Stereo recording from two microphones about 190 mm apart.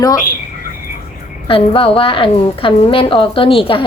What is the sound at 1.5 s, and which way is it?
A woman's voice, 30° left (ahead or behind).